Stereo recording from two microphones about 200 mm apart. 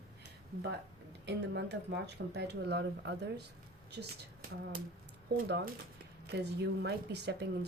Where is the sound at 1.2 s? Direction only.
60° right (ahead or behind).